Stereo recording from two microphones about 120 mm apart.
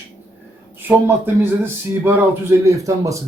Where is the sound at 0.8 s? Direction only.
20° right (ahead or behind).